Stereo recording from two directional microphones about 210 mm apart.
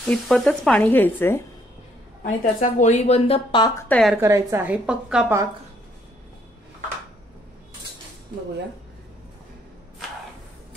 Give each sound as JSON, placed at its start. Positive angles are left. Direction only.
{"t": 0.0, "sound": "speech", "side_deg": 0}
{"t": 2.2, "sound": "speech", "side_deg": 35}
{"t": 3.9, "sound": "speech", "side_deg": 0}
{"t": 4.2, "sound": "a woman's voice", "side_deg": -15}